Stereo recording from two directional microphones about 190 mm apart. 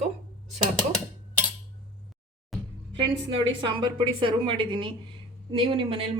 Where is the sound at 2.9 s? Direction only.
25° right (ahead or behind).